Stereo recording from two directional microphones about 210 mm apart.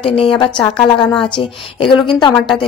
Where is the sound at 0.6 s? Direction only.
5° left (ahead or behind).